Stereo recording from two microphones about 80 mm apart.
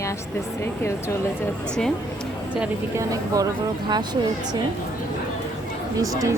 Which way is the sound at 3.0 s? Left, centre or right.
Right.